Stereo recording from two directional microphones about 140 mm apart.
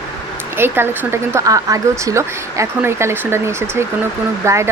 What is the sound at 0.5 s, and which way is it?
Speech, 15° right (ahead or behind).